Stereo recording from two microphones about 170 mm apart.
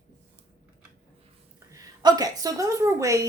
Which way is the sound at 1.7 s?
20° right (ahead or behind).